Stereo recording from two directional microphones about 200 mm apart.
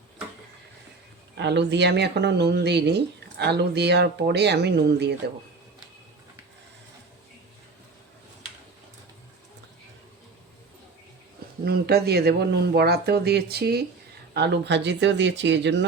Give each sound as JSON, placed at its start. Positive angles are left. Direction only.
{"t": 1.4, "sound": "speech", "side_deg": -60}
{"t": 11.6, "sound": "speech", "side_deg": -50}